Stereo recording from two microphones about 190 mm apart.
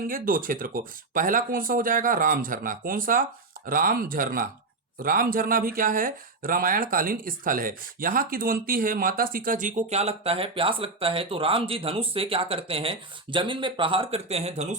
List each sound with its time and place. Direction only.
0.1 s speech: 45° right (ahead or behind)